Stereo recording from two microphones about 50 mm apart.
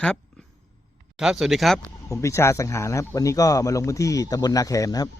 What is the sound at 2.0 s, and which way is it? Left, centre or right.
Speech, left.